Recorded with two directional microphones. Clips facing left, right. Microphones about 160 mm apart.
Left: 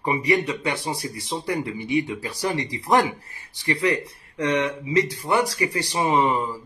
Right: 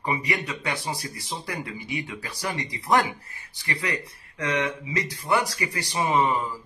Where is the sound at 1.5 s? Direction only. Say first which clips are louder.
Left 9 dB; 30° left (ahead or behind).